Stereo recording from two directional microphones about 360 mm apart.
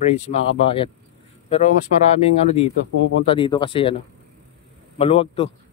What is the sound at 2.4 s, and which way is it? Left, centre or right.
Speech, centre.